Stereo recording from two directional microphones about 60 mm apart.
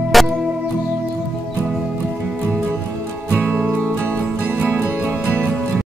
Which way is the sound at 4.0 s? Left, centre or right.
Right.